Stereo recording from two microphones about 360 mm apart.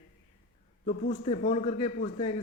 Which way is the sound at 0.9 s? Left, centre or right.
Centre.